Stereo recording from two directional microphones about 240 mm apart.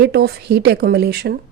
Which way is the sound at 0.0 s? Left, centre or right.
Right.